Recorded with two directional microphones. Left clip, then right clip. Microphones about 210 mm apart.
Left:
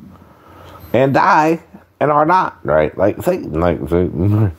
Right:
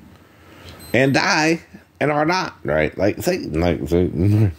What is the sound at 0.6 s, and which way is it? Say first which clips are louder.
Speech: left 3 dB; 15° right (ahead or behind).